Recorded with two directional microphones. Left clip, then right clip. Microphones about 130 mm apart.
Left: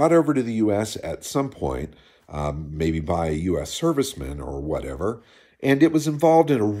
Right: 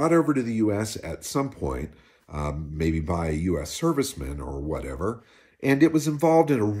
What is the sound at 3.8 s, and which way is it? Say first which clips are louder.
Speech: left 2 dB; 20° left (ahead or behind).